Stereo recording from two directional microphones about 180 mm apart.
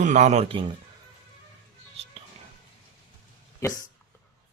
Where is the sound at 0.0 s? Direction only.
40° right (ahead or behind).